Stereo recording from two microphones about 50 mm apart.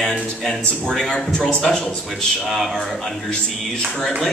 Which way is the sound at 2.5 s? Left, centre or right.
Centre.